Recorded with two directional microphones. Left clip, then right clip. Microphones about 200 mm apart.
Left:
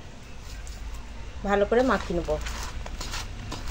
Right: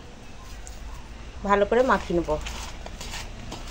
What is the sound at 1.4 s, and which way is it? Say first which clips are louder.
Speech: right 2 dB; 20° right (ahead or behind).